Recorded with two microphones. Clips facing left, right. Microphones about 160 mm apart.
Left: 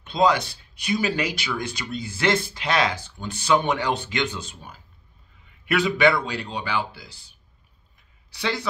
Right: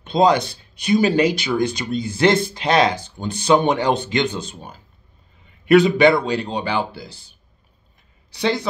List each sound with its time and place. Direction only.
0.0 s speech: 20° right (ahead or behind)
8.3 s speech: 20° right (ahead or behind)